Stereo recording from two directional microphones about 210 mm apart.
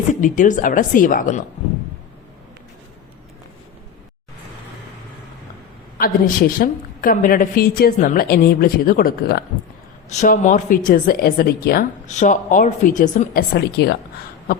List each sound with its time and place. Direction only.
0.1 s a woman's voice: 40° left (ahead or behind)
6.0 s a woman's voice: 45° left (ahead or behind)
10.1 s a woman's voice: 35° left (ahead or behind)
13.8 s a woman's voice: 55° left (ahead or behind)